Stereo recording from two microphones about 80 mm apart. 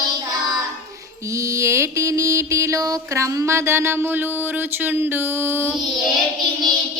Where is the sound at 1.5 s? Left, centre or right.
Right.